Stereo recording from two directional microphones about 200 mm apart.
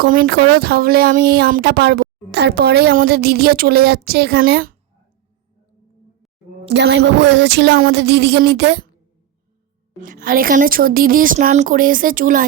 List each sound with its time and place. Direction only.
0.0 s speech: 50° right (ahead or behind)
6.7 s a sound: 60° right (ahead or behind)
10.0 s speech: 45° right (ahead or behind)